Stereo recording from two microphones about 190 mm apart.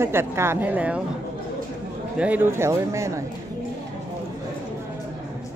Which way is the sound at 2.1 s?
10° right (ahead or behind).